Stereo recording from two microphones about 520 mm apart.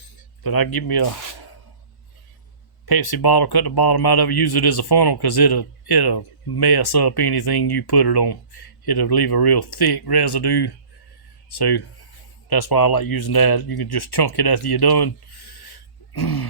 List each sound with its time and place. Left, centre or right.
0.4 s speech: left
2.8 s speech: left